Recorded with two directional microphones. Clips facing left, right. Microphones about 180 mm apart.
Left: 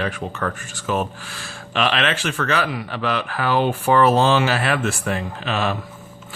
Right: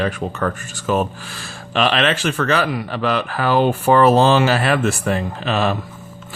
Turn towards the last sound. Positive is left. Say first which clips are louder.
# right 4 dB
turn(degrees=-40)  # may be behind; listen again after turning